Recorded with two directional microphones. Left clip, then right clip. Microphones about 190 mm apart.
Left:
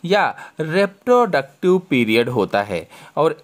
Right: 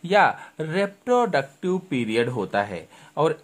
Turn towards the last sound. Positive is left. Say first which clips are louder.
# left 5 dB
turn(degrees=35)  # may be behind; listen again after turning